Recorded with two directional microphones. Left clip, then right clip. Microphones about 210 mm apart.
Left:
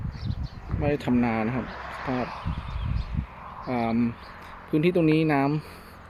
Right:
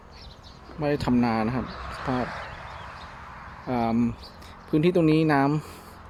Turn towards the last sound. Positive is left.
turn(degrees=-10)  # may be behind; listen again after turning